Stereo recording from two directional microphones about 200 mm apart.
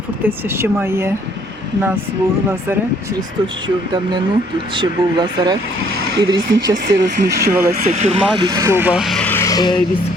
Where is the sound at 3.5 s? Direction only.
25° right (ahead or behind).